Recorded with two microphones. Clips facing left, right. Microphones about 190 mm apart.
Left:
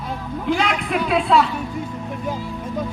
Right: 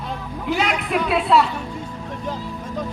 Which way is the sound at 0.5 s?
5° right (ahead or behind).